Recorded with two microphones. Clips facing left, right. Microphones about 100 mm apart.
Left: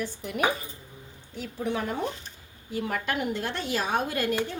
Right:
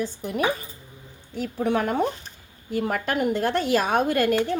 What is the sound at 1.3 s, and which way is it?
Speech, 55° right (ahead or behind).